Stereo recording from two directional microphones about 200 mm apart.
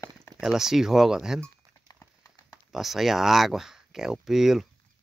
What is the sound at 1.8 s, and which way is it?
Clip-clop, 15° left (ahead or behind).